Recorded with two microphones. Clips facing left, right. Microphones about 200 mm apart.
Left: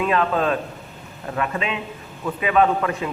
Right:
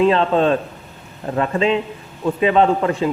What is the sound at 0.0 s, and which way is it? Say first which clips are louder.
Speech: right 6 dB; 30° right (ahead or behind).